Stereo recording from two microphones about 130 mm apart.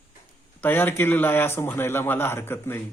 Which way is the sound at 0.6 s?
15° left (ahead or behind).